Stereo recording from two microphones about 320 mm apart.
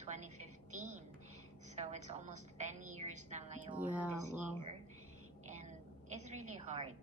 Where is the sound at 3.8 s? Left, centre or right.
Centre.